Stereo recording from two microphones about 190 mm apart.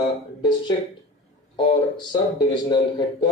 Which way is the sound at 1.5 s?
25° left (ahead or behind).